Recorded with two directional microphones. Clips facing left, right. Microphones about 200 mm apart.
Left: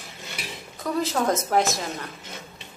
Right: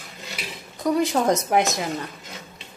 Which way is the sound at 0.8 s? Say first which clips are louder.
Right 4 dB; 15° right (ahead or behind).